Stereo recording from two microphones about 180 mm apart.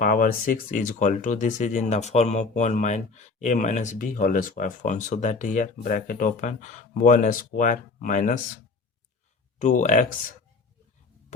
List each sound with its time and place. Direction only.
0.0 s speech: 50° left (ahead or behind)
9.6 s speech: 45° left (ahead or behind)